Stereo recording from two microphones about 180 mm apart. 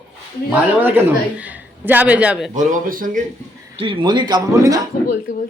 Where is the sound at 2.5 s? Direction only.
50° right (ahead or behind).